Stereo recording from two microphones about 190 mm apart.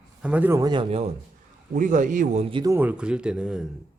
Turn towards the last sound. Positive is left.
turn(degrees=-5)  # may be behind; listen again after turning